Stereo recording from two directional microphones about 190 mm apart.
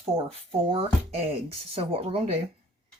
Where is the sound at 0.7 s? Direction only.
30° right (ahead or behind).